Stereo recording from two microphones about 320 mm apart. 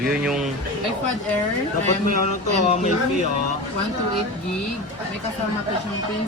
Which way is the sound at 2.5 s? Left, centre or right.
Left.